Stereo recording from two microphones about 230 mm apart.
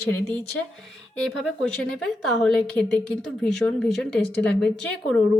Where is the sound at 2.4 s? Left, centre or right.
Centre.